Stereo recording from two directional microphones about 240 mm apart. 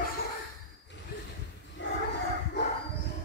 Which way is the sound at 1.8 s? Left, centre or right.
Left.